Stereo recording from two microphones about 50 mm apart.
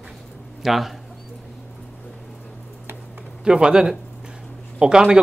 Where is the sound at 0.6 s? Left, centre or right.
Centre.